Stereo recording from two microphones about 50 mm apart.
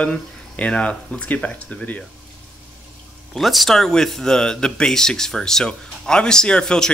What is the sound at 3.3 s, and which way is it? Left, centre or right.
A man's voice, centre.